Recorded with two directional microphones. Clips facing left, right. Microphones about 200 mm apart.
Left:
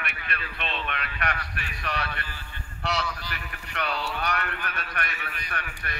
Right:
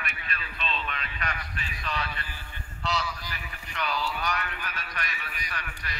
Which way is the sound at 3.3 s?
65° left (ahead or behind).